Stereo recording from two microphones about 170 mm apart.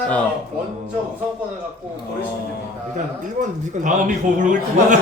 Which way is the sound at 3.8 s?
50° right (ahead or behind).